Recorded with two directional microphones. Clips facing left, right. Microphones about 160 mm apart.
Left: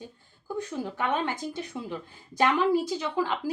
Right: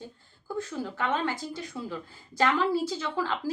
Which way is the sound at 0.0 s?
15° left (ahead or behind).